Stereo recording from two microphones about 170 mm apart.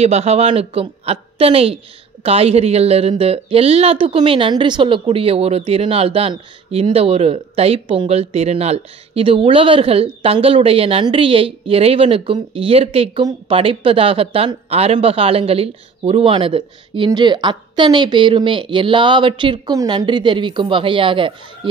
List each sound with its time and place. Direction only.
0.0 s a woman's voice: 40° right (ahead or behind)